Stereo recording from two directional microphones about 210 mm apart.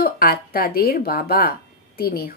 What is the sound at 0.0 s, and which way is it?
Speech, 45° left (ahead or behind).